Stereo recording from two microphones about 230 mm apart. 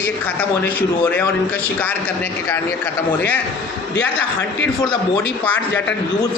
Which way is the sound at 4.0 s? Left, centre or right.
Left.